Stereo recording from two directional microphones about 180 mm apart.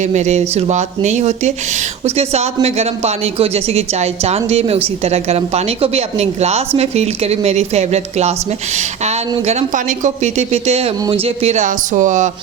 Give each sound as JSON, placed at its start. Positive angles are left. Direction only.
{"t": 0.0, "sound": "speech", "side_deg": -40}
{"t": 9.5, "sound": "speech", "side_deg": -40}